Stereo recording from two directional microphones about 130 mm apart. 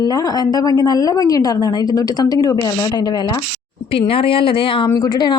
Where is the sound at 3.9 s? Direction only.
45° left (ahead or behind).